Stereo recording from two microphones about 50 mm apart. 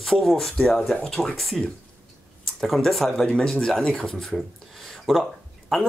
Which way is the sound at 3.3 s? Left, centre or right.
Centre.